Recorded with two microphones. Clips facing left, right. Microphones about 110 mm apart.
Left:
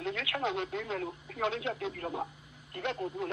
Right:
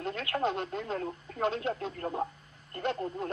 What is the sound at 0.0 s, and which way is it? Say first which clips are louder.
Radio: even; 45° right (ahead or behind).